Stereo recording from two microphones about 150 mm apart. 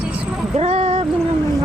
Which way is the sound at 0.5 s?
45° right (ahead or behind).